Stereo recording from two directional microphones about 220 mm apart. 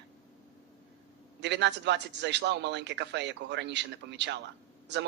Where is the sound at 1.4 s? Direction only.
50° right (ahead or behind).